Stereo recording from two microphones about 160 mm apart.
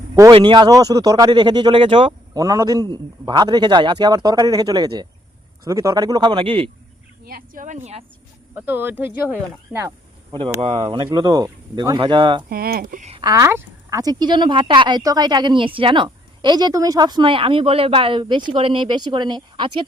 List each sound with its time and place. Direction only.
0.2 s speech: 30° right (ahead or behind)
2.4 s speech: 20° right (ahead or behind)
7.3 s a woman's voice: 60° right (ahead or behind)
8.5 s speech: 10° right (ahead or behind)
10.6 s speech: 35° right (ahead or behind)
12.5 s speech: 70° right (ahead or behind)
13.0 s speech: 40° right (ahead or behind)
13.2 s speech: 20° right (ahead or behind)